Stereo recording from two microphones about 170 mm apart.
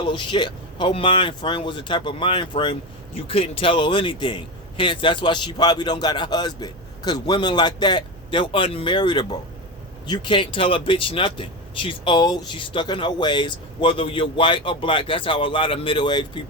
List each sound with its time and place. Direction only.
0.0 s speech: 30° left (ahead or behind)